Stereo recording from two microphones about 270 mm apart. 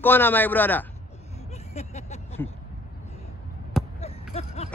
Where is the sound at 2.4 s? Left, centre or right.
Centre.